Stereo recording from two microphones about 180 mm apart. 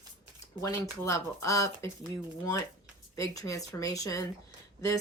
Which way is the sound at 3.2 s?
15° left (ahead or behind).